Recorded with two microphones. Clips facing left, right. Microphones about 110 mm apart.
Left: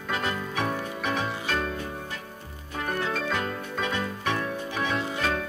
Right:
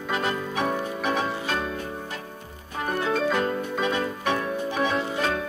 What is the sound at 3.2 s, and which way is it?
Music, 15° right (ahead or behind).